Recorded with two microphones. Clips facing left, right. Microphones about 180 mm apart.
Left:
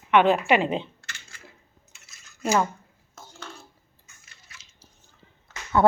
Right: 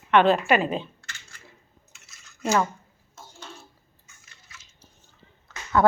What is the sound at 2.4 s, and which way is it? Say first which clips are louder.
Speech: even; 10° left (ahead or behind).